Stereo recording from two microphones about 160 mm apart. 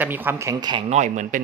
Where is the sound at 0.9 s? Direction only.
50° right (ahead or behind).